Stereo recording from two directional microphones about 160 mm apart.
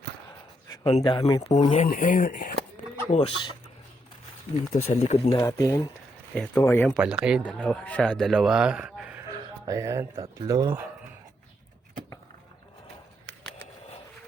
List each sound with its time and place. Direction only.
0.9 s speech: 35° left (ahead or behind); by 2.6 s 60° left (ahead or behind)
3.1 s speech: 45° left (ahead or behind)
4.7 s speech: 50° left (ahead or behind)
5.3 s speech: 20° left (ahead or behind)
6.3 s speech: 5° left (ahead or behind)
7.0 s speech: 5° right (ahead or behind)
7.4 s speech: 5° left (ahead or behind)
9.6 s speech: 20° right (ahead or behind)